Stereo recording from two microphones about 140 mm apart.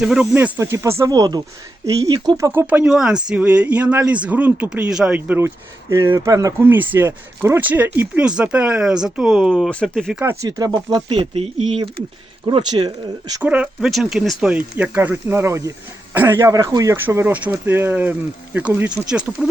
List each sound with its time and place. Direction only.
0.0 s speech: 5° right (ahead or behind); by 2.5 s 25° right (ahead or behind)
2.5 s speech: 15° right (ahead or behind)
10.2 s speech: 15° right (ahead or behind)
10.6 s speech: 35° right (ahead or behind); by 11.8 s 50° right (ahead or behind)
12.5 s speech: 30° right (ahead or behind)
13.4 s speech: 10° right (ahead or behind)